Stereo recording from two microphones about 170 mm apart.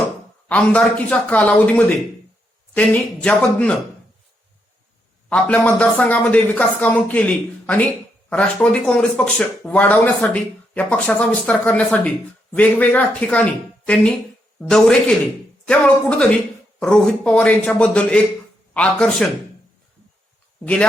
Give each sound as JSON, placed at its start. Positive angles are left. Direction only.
{"t": 0.4, "sound": "speech", "side_deg": 10}
{"t": 5.3, "sound": "speech", "side_deg": 5}